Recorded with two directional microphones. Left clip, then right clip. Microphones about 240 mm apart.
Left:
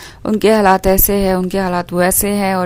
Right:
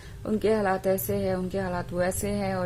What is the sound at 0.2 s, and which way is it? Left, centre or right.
A woman's voice, left.